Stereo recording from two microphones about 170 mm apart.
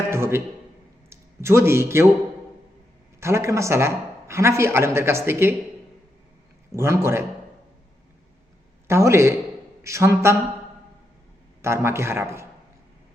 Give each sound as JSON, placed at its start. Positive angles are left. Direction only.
{"t": 0.1, "sound": "a man's voice", "side_deg": -15}
{"t": 3.2, "sound": "a man's voice", "side_deg": -15}
{"t": 6.7, "sound": "a man's voice", "side_deg": -15}
{"t": 8.9, "sound": "a man's voice", "side_deg": -15}
{"t": 11.6, "sound": "a man's voice", "side_deg": -15}